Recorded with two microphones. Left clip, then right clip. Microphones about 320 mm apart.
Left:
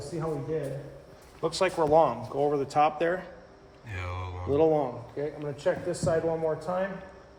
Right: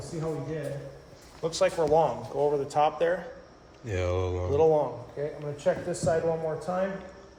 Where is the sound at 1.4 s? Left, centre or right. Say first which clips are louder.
Right 1 dB; left.